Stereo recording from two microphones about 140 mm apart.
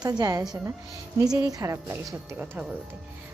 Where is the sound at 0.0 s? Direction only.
30° right (ahead or behind).